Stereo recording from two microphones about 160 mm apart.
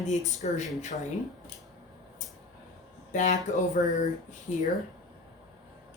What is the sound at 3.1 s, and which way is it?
Speech, 50° left (ahead or behind).